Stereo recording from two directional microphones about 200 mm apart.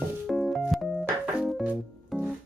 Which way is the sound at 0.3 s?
Centre (ahead or behind).